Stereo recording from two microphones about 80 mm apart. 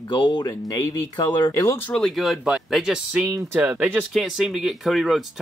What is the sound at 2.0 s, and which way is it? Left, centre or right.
Speech, centre.